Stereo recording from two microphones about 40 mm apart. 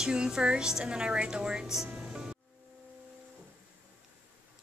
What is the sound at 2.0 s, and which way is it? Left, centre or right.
Music, right.